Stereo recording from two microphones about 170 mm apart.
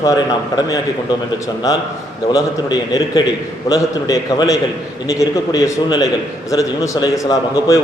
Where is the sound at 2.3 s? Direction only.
20° left (ahead or behind).